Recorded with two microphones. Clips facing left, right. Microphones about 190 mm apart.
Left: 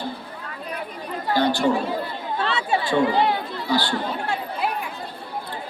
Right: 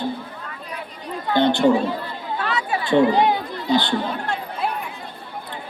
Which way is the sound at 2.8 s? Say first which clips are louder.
Right 5 dB; 20° right (ahead or behind).